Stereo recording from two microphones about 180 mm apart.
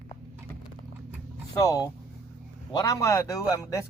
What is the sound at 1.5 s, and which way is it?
A man's voice, 20° left (ahead or behind).